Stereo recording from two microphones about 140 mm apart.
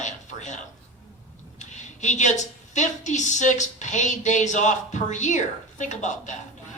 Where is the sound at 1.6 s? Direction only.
60° left (ahead or behind).